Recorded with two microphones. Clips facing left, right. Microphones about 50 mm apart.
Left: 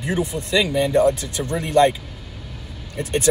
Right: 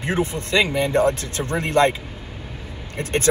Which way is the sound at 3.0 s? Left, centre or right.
Right.